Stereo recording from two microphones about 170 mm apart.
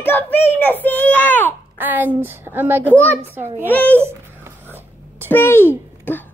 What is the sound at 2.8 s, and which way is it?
A child's voice, 10° left (ahead or behind).